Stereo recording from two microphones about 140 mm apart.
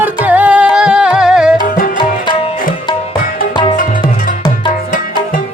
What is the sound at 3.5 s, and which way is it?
Music, 35° left (ahead or behind).